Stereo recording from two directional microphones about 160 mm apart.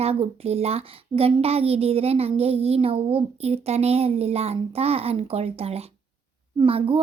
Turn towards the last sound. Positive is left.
turn(degrees=-35)  # may be behind; listen again after turning